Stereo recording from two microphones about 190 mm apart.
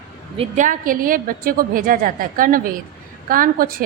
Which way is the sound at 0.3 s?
40° right (ahead or behind).